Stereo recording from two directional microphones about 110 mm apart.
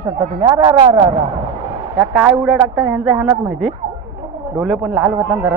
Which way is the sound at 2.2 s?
5° right (ahead or behind).